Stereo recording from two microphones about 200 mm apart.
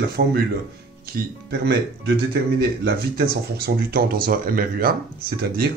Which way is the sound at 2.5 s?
50° right (ahead or behind).